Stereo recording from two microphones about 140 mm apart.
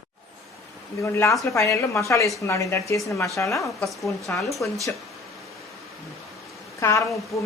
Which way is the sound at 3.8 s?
Centre (ahead or behind).